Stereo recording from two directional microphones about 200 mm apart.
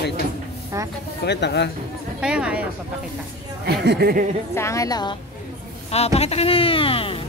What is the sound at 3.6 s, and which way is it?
Speech, 55° right (ahead or behind).